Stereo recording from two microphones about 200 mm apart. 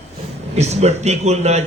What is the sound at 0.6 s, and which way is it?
Mantra, 35° right (ahead or behind).